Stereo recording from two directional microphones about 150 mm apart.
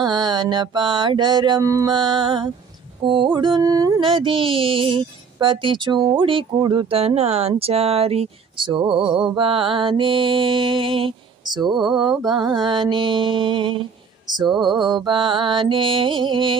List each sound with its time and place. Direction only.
0.0 s mantra: 30° right (ahead or behind)
3.0 s music: 30° right (ahead or behind)
11.9 s mantra: 30° right (ahead or behind)
12.4 s music: 30° right (ahead or behind)
14.5 s music: centre (ahead or behind)
14.8 s music: 30° right (ahead or behind)